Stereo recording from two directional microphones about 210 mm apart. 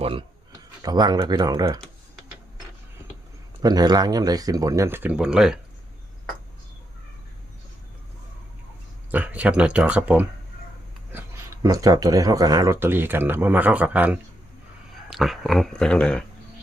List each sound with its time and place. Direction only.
0.0 s speech: 25° right (ahead or behind)
3.6 s speech: 20° right (ahead or behind)
9.1 s speech: 5° right (ahead or behind)
11.6 s speech: 15° right (ahead or behind); by 16.2 s 5° left (ahead or behind)